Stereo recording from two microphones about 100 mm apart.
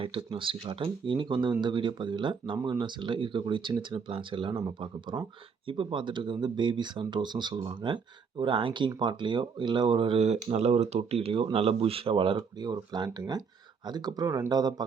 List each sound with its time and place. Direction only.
0.0 s speech: 65° right (ahead or behind); by 14.8 s 40° right (ahead or behind)